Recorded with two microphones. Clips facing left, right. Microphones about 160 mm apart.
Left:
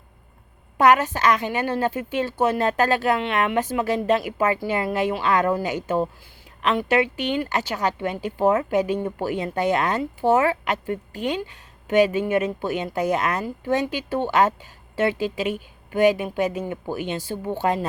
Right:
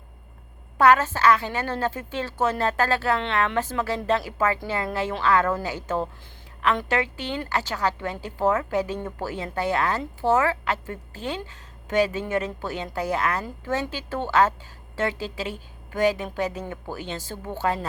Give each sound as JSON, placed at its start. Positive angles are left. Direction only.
{"t": 0.8, "sound": "speech", "side_deg": 15}